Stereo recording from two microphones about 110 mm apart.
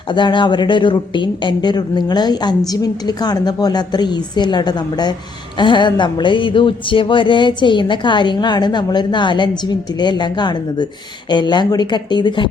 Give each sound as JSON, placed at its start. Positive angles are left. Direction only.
{"t": 0.1, "sound": "speech", "side_deg": 45}